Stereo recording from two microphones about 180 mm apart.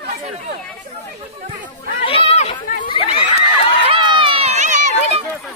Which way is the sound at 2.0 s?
30° left (ahead or behind).